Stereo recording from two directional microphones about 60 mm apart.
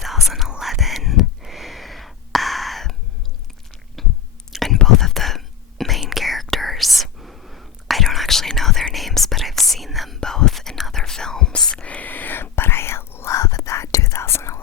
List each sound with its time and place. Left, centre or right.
0.3 s whispering: centre
4.0 s chewing: centre
4.5 s a sound: centre
6.0 s whispering: centre
12.0 s whispering: left
13.3 s whispering: left